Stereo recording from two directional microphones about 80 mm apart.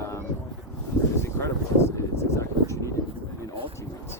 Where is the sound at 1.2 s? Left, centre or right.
Left.